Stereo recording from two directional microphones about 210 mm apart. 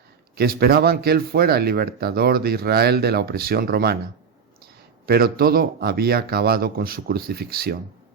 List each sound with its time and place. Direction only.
0.3 s speech: 50° right (ahead or behind)
5.0 s speech: 45° right (ahead or behind)